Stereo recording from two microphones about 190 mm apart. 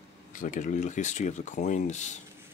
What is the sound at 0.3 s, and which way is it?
Speech, 45° left (ahead or behind).